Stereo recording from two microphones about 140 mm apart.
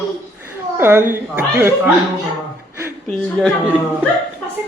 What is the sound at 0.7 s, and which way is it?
Speech, 15° right (ahead or behind).